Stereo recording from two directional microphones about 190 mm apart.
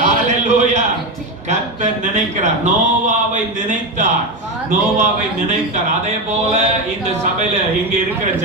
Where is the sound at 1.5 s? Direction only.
40° right (ahead or behind).